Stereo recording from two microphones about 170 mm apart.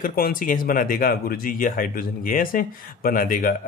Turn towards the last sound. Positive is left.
turn(degrees=55)  # may be behind; listen again after turning